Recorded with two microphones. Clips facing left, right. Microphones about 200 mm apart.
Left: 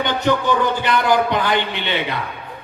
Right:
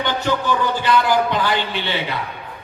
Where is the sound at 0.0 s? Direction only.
20° left (ahead or behind).